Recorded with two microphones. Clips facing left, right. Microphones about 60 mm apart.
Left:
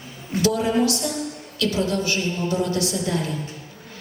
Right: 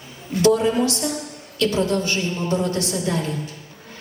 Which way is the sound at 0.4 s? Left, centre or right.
Right.